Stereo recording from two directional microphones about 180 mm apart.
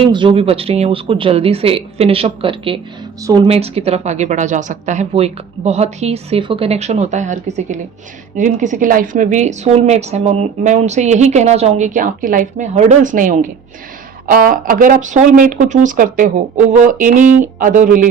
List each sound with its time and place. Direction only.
0.0 s a woman's voice: 25° right (ahead or behind); by 18.1 s 50° right (ahead or behind)